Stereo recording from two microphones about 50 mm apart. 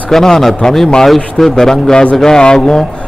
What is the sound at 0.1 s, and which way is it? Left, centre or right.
A man's voice, centre.